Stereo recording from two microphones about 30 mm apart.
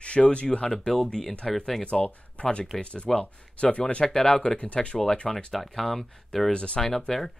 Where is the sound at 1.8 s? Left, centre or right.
Left.